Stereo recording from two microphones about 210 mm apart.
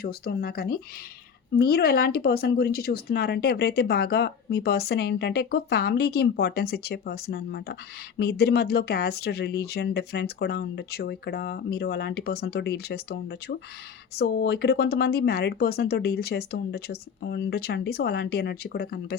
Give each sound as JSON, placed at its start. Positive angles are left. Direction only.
{"t": 0.0, "sound": "speech", "side_deg": 45}